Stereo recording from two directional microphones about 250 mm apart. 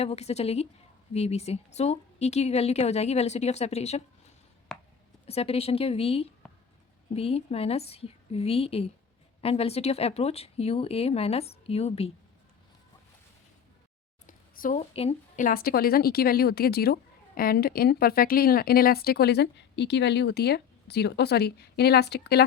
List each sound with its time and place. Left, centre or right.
0.0 s a woman's voice: left
4.7 s a sound: centre
5.2 s a woman's voice: left
6.4 s a sound: centre
7.1 s a woman's voice: left
14.3 s a woman's voice: left